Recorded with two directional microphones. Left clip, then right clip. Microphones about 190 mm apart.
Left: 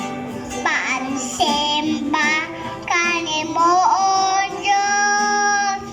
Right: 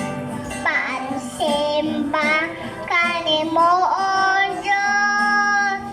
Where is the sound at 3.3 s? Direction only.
15° left (ahead or behind).